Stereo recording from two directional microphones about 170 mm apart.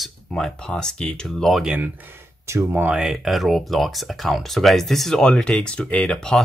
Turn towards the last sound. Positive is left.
turn(degrees=5)  # may be behind; listen again after turning